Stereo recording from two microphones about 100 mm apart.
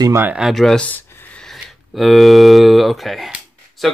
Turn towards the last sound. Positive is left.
turn(degrees=0)  # may be behind; listen again after turning